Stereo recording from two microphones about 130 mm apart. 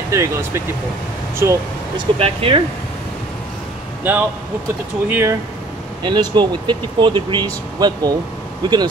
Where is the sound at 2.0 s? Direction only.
45° right (ahead or behind).